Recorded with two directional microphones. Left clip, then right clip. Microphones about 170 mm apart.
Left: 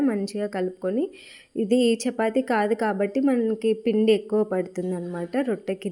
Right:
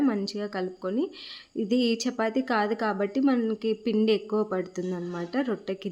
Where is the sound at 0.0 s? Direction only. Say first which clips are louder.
Left 2 dB; 10° left (ahead or behind).